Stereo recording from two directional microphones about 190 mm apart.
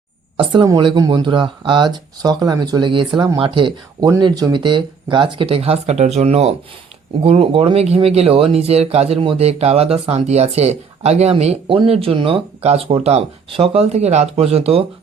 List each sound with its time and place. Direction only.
0.3 s speech: 25° right (ahead or behind)